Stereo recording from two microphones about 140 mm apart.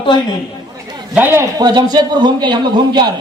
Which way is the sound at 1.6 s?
30° right (ahead or behind).